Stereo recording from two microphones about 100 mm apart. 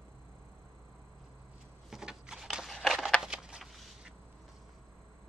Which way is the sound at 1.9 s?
5° right (ahead or behind).